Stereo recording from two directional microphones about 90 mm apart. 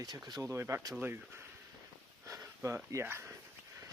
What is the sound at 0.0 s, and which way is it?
Speech, 45° right (ahead or behind).